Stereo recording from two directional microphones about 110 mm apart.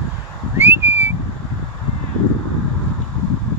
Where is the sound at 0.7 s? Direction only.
20° right (ahead or behind).